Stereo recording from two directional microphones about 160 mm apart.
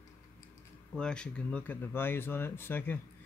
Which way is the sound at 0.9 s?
5° left (ahead or behind).